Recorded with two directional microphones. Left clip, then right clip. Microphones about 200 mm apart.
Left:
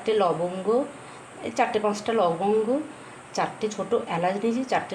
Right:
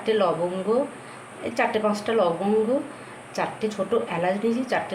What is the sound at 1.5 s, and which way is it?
Speech, 20° left (ahead or behind).